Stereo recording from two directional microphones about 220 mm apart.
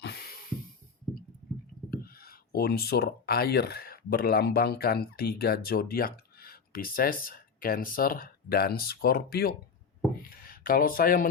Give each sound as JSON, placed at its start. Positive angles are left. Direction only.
{"t": 0.0, "sound": "music", "side_deg": 45}
{"t": 1.9, "sound": "speech", "side_deg": 45}
{"t": 10.2, "sound": "a sound", "side_deg": 40}